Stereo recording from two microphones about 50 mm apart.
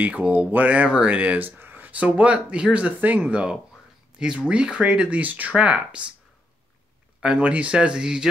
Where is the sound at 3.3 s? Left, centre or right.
Right.